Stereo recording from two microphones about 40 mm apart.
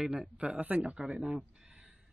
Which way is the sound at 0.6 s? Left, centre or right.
Right.